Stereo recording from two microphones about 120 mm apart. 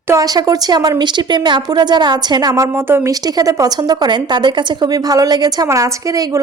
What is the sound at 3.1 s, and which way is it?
Speech, 30° right (ahead or behind).